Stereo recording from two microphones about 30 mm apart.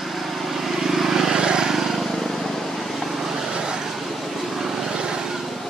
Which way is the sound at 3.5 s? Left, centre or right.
Right.